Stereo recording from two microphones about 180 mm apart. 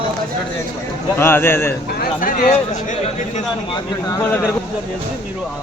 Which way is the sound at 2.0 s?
50° left (ahead or behind).